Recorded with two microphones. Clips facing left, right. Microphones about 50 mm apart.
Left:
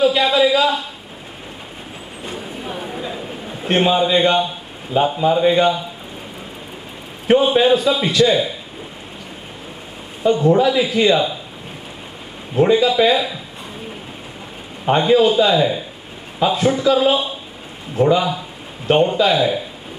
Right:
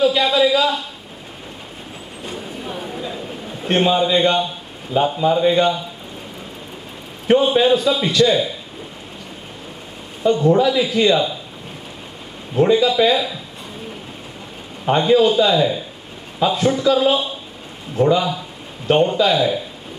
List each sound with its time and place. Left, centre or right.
0.0 s a sound: left
2.2 s a sound: centre
4.9 s a man's voice: centre
7.2 s a man's voice: centre
10.2 s a man's voice: centre
12.5 s speech: centre
15.0 s a man's voice: centre